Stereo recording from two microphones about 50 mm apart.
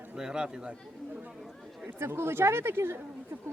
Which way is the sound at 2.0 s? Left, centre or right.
Right.